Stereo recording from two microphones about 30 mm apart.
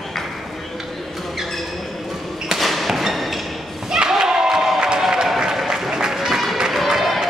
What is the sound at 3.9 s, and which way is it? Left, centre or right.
Crowd, centre.